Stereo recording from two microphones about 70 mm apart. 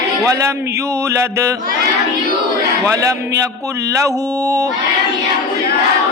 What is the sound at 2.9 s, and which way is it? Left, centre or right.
A man's voice, right.